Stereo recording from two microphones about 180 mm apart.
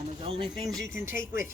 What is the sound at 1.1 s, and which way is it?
Speech, 15° right (ahead or behind).